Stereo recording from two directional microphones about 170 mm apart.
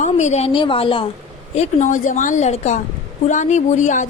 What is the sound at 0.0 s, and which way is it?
A woman's voice, 40° left (ahead or behind).